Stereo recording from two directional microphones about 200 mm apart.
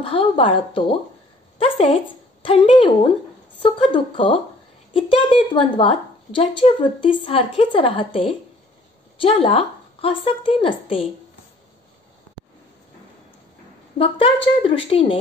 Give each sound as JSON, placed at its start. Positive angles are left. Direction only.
{"t": 0.0, "sound": "a woman's voice", "side_deg": 25}
{"t": 13.9, "sound": "a woman's voice", "side_deg": 30}